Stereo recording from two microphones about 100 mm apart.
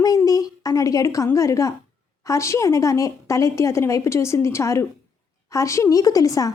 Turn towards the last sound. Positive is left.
turn(degrees=35)  # may be behind; listen again after turning